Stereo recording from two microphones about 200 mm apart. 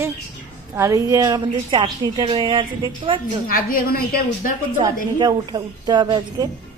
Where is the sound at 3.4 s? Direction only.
45° left (ahead or behind).